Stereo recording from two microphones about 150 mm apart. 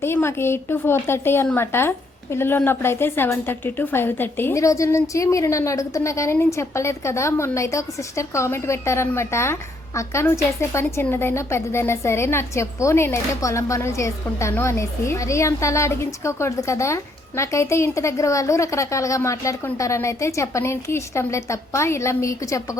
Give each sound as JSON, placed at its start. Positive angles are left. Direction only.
{"t": 0.0, "sound": "a woman's voice", "side_deg": 15}